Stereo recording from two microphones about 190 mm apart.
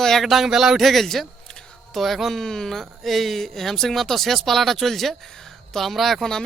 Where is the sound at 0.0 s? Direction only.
Centre (ahead or behind).